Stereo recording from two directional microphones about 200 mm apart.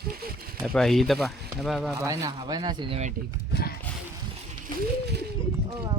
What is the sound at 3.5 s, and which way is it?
Horse, 55° left (ahead or behind).